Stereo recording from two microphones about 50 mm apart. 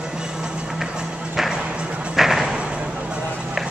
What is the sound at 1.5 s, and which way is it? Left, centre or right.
Music, right.